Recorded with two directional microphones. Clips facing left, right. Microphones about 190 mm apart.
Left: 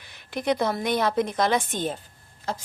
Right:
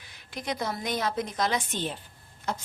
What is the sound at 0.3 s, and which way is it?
A woman's voice, 60° left (ahead or behind).